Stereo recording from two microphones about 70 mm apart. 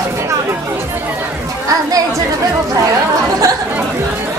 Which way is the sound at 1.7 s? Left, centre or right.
Right.